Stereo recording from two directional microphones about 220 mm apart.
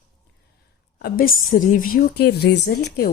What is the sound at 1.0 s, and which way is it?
A woman's voice, 40° left (ahead or behind).